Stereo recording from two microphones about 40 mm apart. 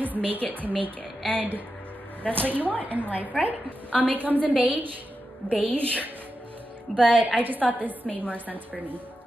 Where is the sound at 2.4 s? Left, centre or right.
Right.